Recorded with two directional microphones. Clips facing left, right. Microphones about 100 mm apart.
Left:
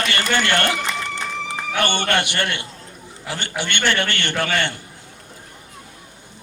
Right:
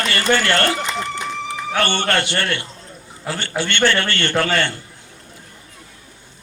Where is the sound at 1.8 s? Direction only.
15° left (ahead or behind).